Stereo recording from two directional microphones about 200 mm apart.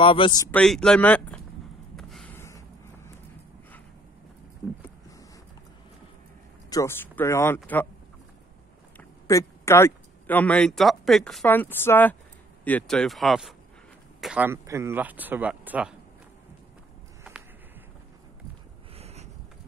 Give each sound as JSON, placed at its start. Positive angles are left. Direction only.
{"t": 0.0, "sound": "speech", "side_deg": 25}
{"t": 0.5, "sound": "speech", "side_deg": 5}
{"t": 2.0, "sound": "gasp", "side_deg": 0}
{"t": 6.7, "sound": "speech", "side_deg": 15}
{"t": 8.9, "sound": "speech", "side_deg": 15}
{"t": 18.9, "sound": "a sound", "side_deg": -30}